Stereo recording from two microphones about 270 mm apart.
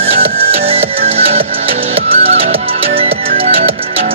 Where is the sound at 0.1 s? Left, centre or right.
Right.